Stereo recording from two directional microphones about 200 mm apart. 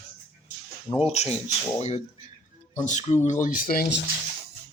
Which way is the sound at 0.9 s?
30° left (ahead or behind).